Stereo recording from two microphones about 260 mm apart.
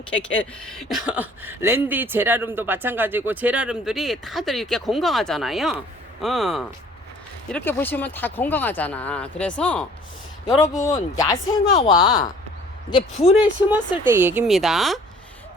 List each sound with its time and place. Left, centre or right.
0.1 s speech: centre; by 13.5 s left
14.0 s speech: centre